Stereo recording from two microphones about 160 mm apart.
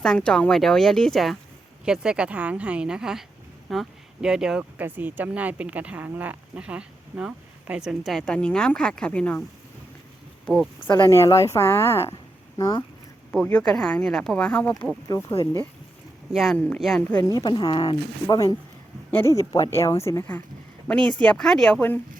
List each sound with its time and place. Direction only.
0.0 s speech: 5° left (ahead or behind)
10.4 s speech: 5° left (ahead or behind)
10.8 s speech: 25° left (ahead or behind)
11.1 s speech: 15° left (ahead or behind)
13.3 s speech: 5° left (ahead or behind)
15.0 s speech: 20° left (ahead or behind)
16.3 s speech: centre (ahead or behind)
17.2 s speech: 25° left (ahead or behind)